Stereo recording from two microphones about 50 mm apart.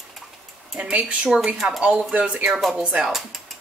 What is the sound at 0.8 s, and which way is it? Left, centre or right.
A woman's voice, right.